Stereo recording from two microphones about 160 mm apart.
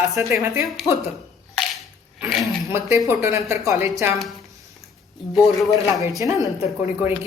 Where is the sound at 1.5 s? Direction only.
Centre (ahead or behind).